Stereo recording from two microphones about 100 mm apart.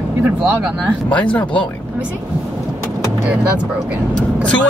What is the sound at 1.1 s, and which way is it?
Speech, 15° left (ahead or behind).